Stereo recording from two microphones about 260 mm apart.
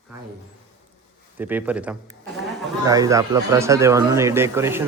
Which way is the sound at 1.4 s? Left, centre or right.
Centre.